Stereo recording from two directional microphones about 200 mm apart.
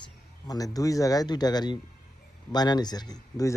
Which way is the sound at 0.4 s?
20° left (ahead or behind).